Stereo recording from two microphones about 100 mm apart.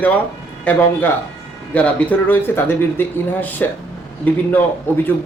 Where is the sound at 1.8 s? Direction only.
15° left (ahead or behind).